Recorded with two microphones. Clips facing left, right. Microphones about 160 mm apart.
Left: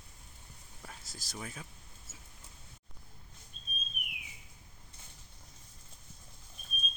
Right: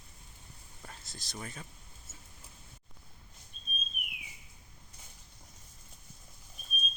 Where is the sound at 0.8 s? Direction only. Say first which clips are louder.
Even; 5° left (ahead or behind).